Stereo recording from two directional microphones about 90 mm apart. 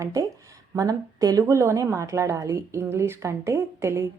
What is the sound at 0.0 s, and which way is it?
A woman's voice, 35° right (ahead or behind).